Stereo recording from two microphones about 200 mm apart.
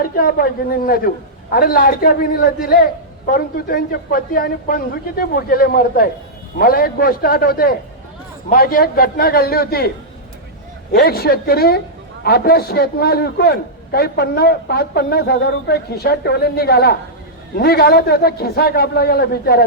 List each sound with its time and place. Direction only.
0.0 s a man's voice: 45° left (ahead or behind)
10.9 s a man's voice: 50° left (ahead or behind)